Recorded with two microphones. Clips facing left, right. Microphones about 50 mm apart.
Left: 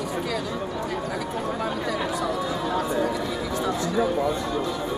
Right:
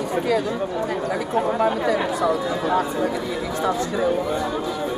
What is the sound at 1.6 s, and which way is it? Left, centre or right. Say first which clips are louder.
Speech: right 6 dB; centre.